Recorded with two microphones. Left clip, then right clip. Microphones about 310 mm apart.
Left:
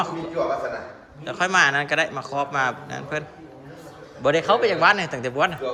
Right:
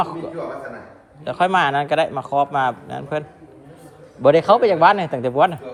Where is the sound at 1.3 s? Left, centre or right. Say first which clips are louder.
Right 2 dB; centre.